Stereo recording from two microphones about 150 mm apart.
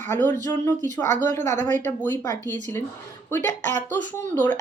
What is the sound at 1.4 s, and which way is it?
Speech, 55° right (ahead or behind).